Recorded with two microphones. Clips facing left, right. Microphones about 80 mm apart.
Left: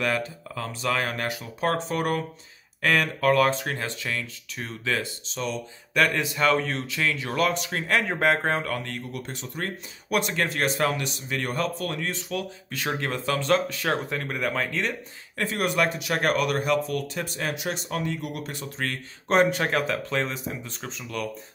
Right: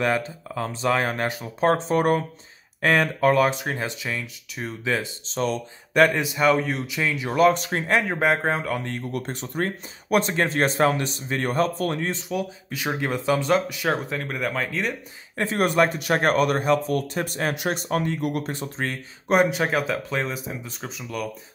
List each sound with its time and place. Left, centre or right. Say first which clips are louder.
0.0 s speech: right 3 dB; right
5.3 s speech: right 6 dB; right
5.9 s speech: right 4 dB; right
7.5 s speech: right 3 dB; right
8.0 s speech: right 1 dB; centre
8.7 s speech: right 3 dB; right
9.1 s speech: right 6 dB; right
12.1 s speech: right 3 dB; centre
15.3 s speech: right 4 dB; right
19.2 s speech: right 1 dB; centre